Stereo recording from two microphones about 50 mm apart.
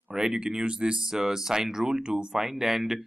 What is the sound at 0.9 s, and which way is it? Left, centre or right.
Speech, centre.